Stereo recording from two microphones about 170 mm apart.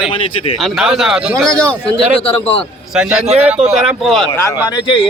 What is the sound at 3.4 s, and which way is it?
Speech, 5° right (ahead or behind).